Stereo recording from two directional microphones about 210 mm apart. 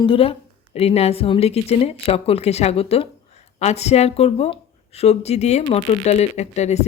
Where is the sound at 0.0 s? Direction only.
25° left (ahead or behind).